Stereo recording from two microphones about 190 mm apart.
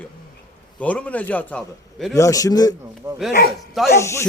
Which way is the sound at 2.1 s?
15° left (ahead or behind).